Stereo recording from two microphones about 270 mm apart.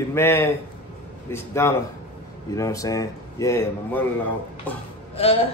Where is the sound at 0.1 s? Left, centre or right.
Centre.